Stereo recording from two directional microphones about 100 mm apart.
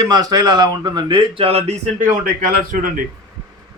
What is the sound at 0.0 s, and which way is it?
Speech, 40° right (ahead or behind).